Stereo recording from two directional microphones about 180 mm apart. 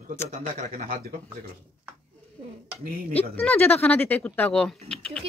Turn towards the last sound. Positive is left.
turn(degrees=5)  # may be behind; listen again after turning